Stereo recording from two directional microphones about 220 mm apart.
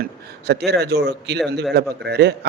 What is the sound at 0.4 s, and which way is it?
A man's voice, 50° right (ahead or behind).